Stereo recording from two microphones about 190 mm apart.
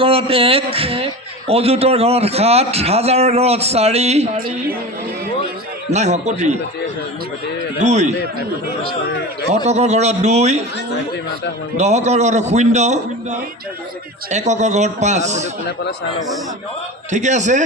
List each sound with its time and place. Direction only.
0.0 s a man's voice: 30° right (ahead or behind)
5.9 s a man's voice: 35° right (ahead or behind)
7.8 s a man's voice: 35° right (ahead or behind)
9.6 s a man's voice: 35° right (ahead or behind)
11.8 s a man's voice: 35° right (ahead or behind)
14.3 s a man's voice: 40° right (ahead or behind)
17.1 s a man's voice: 40° right (ahead or behind)